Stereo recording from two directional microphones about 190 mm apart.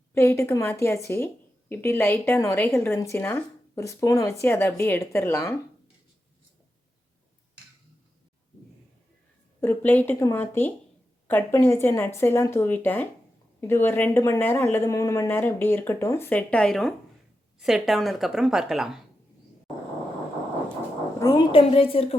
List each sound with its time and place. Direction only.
0.1 s a woman's voice: 15° left (ahead or behind)
9.6 s a woman's voice: 10° left (ahead or behind)
21.2 s a woman's voice: 20° left (ahead or behind)